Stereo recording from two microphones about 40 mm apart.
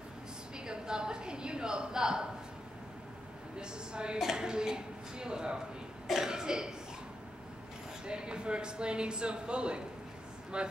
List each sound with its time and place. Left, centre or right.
0.7 s a sound: centre
3.5 s speech: right
8.0 s speech: right